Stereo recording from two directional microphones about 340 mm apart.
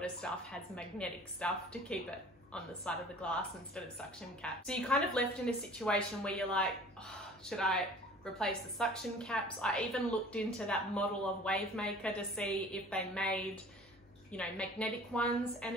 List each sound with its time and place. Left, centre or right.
0.0 s a woman's voice: centre